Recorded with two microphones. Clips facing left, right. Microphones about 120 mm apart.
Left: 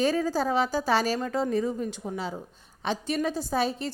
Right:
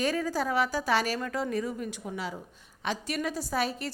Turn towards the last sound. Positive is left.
turn(degrees=25)  # may be behind; listen again after turning